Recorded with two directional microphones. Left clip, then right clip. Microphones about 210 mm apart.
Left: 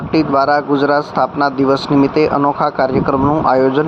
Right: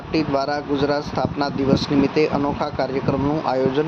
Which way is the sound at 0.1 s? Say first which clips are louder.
Left 9 dB; 20° left (ahead or behind).